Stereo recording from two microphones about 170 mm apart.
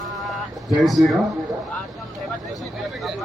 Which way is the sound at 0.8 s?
Centre (ahead or behind).